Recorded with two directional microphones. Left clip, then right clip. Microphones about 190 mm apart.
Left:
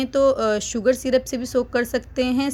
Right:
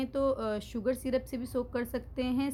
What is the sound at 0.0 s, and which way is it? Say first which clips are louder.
Speech: left 12 dB; 20° left (ahead or behind).